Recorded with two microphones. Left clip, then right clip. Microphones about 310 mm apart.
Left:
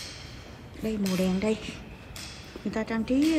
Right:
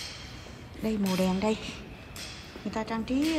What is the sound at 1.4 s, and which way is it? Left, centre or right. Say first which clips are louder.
A woman's voice: left 1 dB; centre.